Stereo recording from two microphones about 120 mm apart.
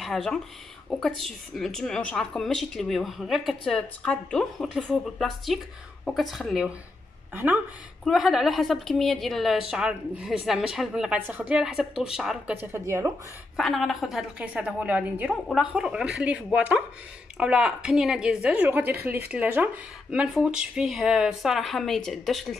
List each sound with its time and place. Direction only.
0.0 s a woman's voice: 5° left (ahead or behind)
7.3 s a woman's voice: 15° right (ahead or behind)
8.0 s a woman's voice: centre (ahead or behind)
12.7 s speech: 20° right (ahead or behind)
13.6 s a woman's voice: centre (ahead or behind)